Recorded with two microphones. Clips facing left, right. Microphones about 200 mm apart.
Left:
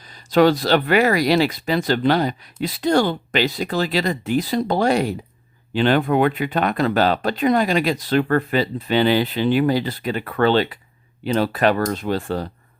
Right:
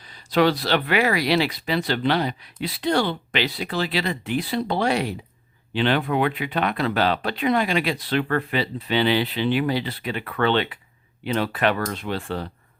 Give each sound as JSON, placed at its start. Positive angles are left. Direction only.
{"t": 0.0, "sound": "speech", "side_deg": 45}